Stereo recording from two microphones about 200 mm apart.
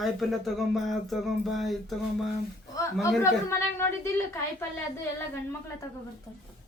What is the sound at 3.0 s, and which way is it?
Speech, 15° left (ahead or behind).